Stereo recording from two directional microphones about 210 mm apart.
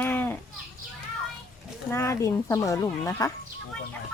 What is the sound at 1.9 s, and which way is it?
Speech, 15° left (ahead or behind).